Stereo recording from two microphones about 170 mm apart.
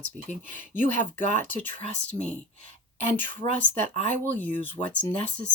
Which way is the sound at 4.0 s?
50° right (ahead or behind).